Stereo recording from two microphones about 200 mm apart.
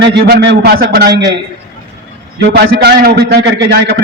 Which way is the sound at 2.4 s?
55° right (ahead or behind).